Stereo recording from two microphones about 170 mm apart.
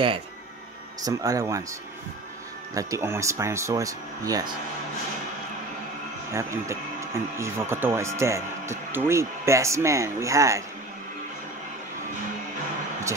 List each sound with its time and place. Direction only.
1.0 s speech: 20° right (ahead or behind)
6.3 s speech: 15° right (ahead or behind)